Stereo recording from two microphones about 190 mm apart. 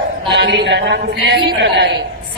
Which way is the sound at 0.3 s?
60° right (ahead or behind).